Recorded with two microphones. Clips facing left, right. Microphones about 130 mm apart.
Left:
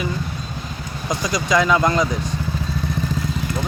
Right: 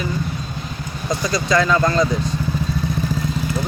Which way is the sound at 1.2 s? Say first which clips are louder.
Even; 15° left (ahead or behind).